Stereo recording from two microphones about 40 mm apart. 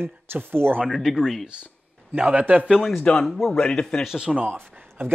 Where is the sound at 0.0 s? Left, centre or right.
Right.